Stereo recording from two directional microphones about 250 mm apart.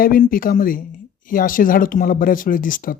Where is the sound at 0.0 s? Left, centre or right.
Left.